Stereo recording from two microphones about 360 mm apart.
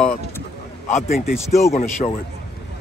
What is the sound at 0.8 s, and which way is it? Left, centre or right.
Speech, centre.